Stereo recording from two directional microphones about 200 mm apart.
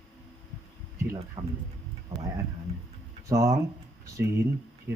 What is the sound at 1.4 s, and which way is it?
Speech, 25° right (ahead or behind).